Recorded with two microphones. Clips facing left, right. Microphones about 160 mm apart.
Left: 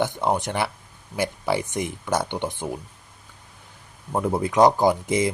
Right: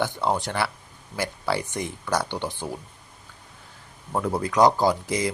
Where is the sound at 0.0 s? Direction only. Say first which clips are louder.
Left 2 dB; 20° left (ahead or behind).